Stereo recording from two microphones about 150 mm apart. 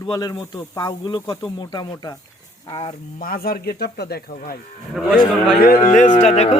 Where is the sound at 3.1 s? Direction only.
75° left (ahead or behind).